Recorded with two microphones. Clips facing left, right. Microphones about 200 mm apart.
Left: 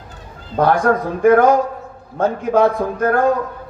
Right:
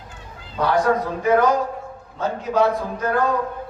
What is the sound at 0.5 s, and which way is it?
A man's voice, 50° left (ahead or behind).